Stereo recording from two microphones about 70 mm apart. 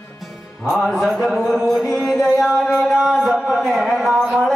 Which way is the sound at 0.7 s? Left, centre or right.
Centre.